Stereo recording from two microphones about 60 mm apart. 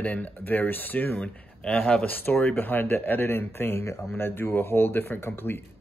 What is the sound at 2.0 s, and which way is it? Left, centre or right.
Speech, left.